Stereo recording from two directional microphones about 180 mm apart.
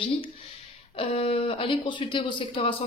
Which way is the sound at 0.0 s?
30° left (ahead or behind).